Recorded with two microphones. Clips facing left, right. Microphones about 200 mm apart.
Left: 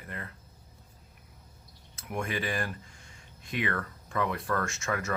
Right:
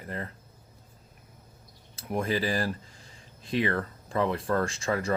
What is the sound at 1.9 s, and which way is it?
Speech, 35° right (ahead or behind).